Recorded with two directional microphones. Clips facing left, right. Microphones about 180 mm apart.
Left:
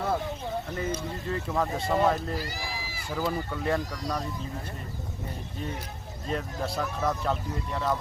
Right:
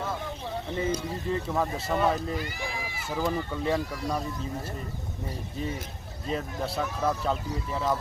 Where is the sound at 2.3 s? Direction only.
35° left (ahead or behind).